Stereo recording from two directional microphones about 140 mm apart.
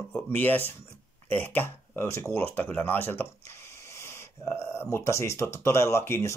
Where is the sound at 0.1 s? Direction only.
15° left (ahead or behind).